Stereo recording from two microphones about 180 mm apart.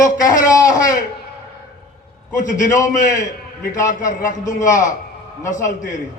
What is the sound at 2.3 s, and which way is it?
Speech, 45° left (ahead or behind).